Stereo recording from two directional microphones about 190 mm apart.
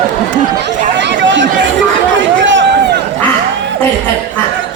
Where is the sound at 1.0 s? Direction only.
70° right (ahead or behind).